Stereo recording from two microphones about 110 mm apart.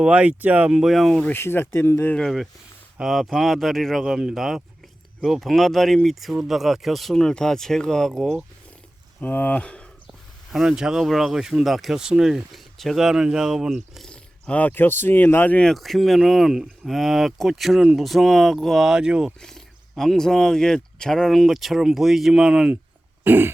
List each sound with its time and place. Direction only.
0.0 s speech: 10° right (ahead or behind)
1.2 s speech: 20° left (ahead or behind)
2.1 s speech: centre (ahead or behind)
9.2 s speech: 15° left (ahead or behind)
10.5 s speech: 5° right (ahead or behind); by 15.7 s 15° left (ahead or behind)
15.7 s speech: centre (ahead or behind)
19.4 s speech: 5° left (ahead or behind)
23.2 s throat clearing: 20° right (ahead or behind)